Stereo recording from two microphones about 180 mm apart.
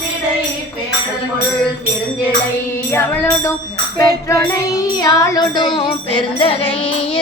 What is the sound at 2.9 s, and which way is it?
Music, 15° left (ahead or behind).